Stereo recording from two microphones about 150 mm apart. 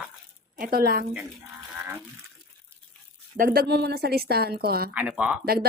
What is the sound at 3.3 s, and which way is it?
Speech, 70° right (ahead or behind).